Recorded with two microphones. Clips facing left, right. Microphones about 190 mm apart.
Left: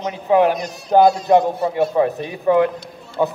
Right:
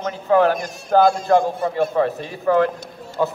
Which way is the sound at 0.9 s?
20° left (ahead or behind).